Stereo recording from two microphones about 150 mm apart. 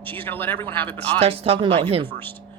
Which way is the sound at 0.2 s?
15° left (ahead or behind).